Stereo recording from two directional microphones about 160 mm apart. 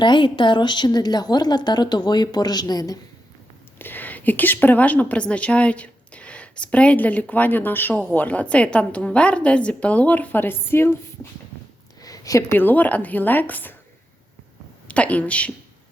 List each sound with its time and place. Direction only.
0.0 s a woman's voice: 30° left (ahead or behind)
3.8 s a woman's voice: 10° left (ahead or behind)
14.8 s speech: 10° left (ahead or behind)